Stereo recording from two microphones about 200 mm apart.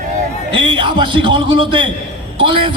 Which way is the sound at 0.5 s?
25° right (ahead or behind).